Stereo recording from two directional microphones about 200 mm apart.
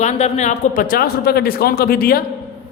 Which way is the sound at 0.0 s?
35° left (ahead or behind).